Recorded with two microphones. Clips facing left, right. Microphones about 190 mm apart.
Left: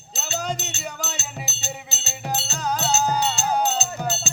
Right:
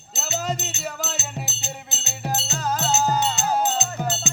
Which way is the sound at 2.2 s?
Centre (ahead or behind).